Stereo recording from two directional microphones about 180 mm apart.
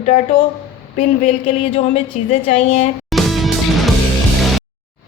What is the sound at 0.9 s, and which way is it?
Speech, 40° left (ahead or behind).